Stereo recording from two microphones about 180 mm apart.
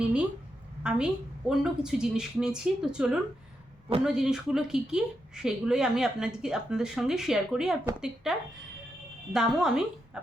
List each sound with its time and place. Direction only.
0.8 s a woman's voice: 5° right (ahead or behind)